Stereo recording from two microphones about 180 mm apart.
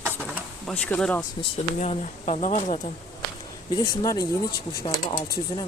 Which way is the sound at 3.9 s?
15° left (ahead or behind).